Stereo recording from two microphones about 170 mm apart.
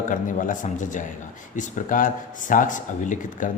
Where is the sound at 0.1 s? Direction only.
50° left (ahead or behind).